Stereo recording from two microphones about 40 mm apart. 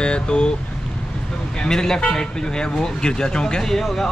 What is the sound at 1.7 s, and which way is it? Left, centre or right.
Speech, centre.